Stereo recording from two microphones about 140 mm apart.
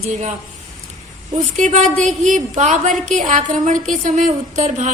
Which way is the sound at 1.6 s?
55° right (ahead or behind).